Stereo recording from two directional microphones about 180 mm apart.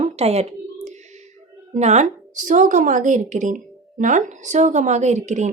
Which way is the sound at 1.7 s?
40° right (ahead or behind).